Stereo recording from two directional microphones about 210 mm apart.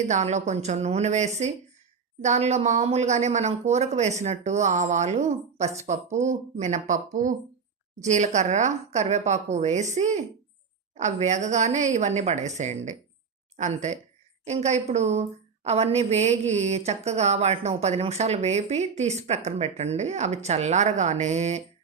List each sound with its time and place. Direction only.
0.1 s a woman's voice: 35° right (ahead or behind)